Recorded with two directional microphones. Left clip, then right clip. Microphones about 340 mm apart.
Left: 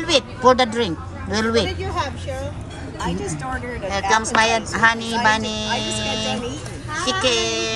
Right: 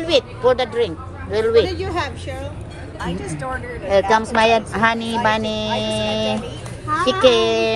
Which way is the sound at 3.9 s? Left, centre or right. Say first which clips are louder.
Right 2 dB; centre.